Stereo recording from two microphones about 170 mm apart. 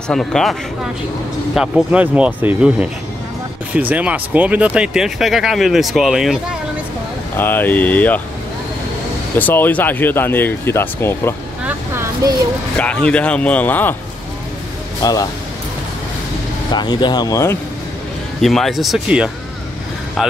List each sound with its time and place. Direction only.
0.1 s speech: 5° left (ahead or behind)
3.9 s speech: 10° right (ahead or behind)
7.3 s speech: 10° left (ahead or behind)
9.4 s speech: 10° left (ahead or behind)
11.6 s vehicle: 15° right (ahead or behind)
12.7 s speech: 5° left (ahead or behind)
15.0 s speech: 20° left (ahead or behind)
16.7 s speech: 25° left (ahead or behind)
18.4 s speech: centre (ahead or behind)